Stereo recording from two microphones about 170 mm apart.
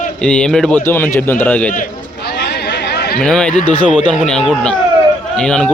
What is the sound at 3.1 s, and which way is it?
Speech, 5° left (ahead or behind).